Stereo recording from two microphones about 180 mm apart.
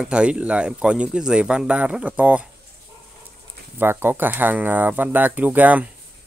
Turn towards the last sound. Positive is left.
turn(degrees=-10)  # may be behind; listen again after turning